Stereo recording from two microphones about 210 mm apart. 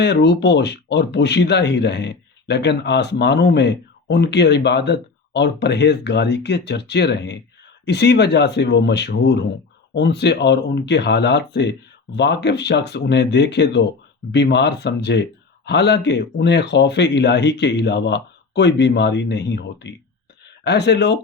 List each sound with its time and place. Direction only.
0.0 s speech: 55° left (ahead or behind)